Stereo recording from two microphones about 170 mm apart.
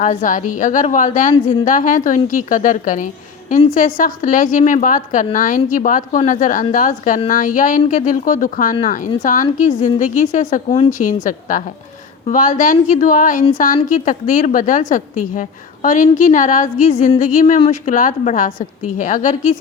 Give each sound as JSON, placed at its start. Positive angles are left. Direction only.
{"t": 0.0, "sound": "speech", "side_deg": 50}